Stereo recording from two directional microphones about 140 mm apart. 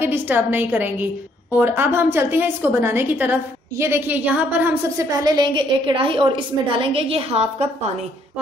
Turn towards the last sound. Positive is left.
turn(degrees=-45)  # may be behind; listen again after turning